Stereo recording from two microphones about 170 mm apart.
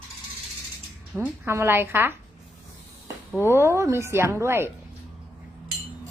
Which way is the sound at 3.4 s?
15° right (ahead or behind).